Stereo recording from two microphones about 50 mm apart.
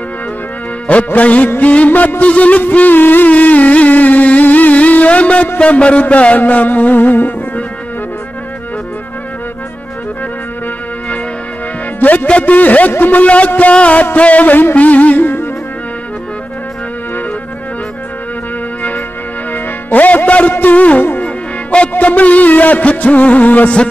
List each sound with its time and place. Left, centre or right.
0.8 s speech: left
1.6 s music: left
12.0 s music: left
12.3 s a man's voice: left
12.9 s music: left
15.2 s music: left
19.5 s music: left
20.2 s speech: left
20.6 s music: left
21.2 s a man's voice: left